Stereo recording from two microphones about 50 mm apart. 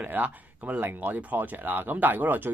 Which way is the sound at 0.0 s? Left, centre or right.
Right.